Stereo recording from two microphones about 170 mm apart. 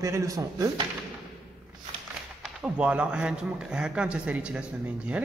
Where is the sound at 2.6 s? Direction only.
5° right (ahead or behind).